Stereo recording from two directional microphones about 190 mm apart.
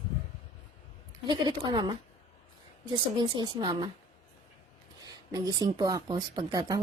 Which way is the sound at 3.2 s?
20° right (ahead or behind).